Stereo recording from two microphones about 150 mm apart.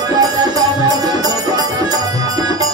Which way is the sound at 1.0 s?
25° right (ahead or behind).